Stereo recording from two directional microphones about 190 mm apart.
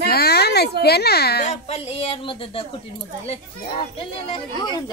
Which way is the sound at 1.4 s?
35° left (ahead or behind).